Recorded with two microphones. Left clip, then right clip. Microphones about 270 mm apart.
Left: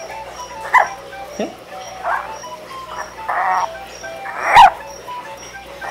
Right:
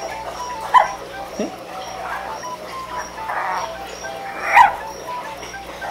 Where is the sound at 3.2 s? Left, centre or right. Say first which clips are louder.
Left 6 dB; centre.